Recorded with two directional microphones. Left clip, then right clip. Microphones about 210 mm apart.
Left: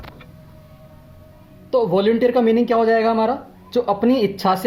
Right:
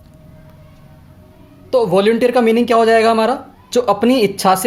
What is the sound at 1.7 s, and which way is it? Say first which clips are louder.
Speech: right 4 dB; 15° right (ahead or behind).